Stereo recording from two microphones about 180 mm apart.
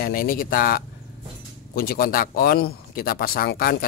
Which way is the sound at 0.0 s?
55° left (ahead or behind).